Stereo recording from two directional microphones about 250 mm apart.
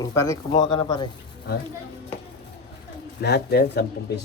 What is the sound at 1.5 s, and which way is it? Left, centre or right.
Speech, left.